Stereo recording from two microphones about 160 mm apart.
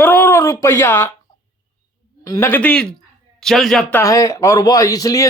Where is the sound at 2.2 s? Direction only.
20° left (ahead or behind); by 3.8 s centre (ahead or behind).